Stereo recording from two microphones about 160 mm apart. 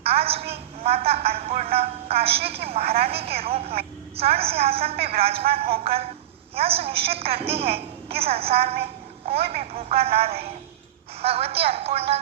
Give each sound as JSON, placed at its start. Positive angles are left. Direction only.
{"t": 0.0, "sound": "a woman's voice", "side_deg": -40}
{"t": 4.9, "sound": "a man's voice", "side_deg": -75}
{"t": 5.2, "sound": "a woman's voice", "side_deg": -40}